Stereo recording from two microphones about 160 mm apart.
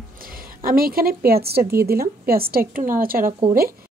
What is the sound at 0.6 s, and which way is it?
A woman's voice, 65° right (ahead or behind).